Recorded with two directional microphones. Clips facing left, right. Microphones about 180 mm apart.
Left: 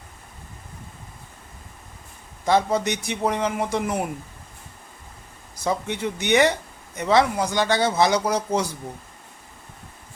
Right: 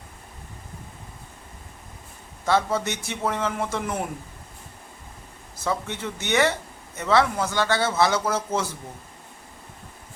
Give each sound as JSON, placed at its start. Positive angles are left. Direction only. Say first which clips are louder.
{"t": 2.5, "sound": "speech", "louder": "left 3 dB", "side_deg": 15}
{"t": 5.5, "sound": "speech", "louder": "left 3 dB", "side_deg": 15}